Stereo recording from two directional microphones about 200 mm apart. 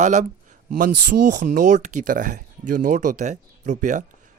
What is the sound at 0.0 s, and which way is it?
A man's voice, 35° right (ahead or behind).